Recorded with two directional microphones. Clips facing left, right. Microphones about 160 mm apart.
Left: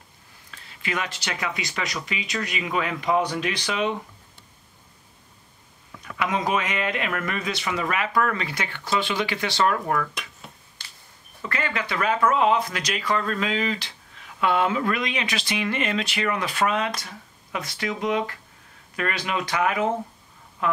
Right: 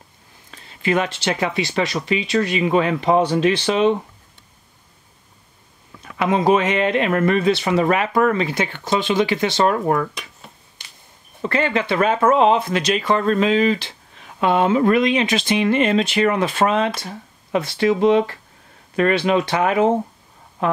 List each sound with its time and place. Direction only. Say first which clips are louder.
0.5 s speech: right 10 dB; 30° right (ahead or behind)
6.1 s speech: right 8 dB; 30° right (ahead or behind)
11.4 s speech: right 9 dB; 25° right (ahead or behind)